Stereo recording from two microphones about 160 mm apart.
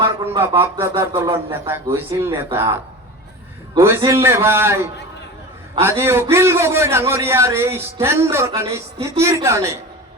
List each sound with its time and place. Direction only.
0.0 s a man's voice: 20° right (ahead or behind)
3.8 s a man's voice: 20° right (ahead or behind)